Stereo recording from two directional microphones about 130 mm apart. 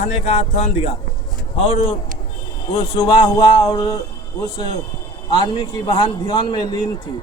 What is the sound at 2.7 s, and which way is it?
Speech, 35° left (ahead or behind).